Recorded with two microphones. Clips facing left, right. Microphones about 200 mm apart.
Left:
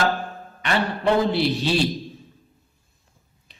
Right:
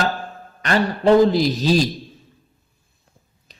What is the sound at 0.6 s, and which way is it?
A man's voice, 40° right (ahead or behind).